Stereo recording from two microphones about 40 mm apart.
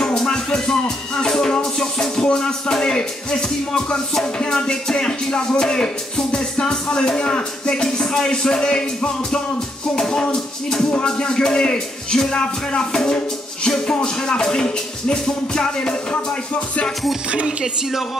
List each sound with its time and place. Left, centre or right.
0.0 s music: centre
2.2 s speech: centre
9.9 s music: centre
11.1 s speech: left
13.7 s music: centre
14.0 s speech: left
17.3 s speech: right